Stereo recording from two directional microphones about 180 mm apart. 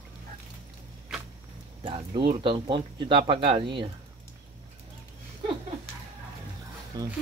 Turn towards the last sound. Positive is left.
turn(degrees=-20)  # may be behind; listen again after turning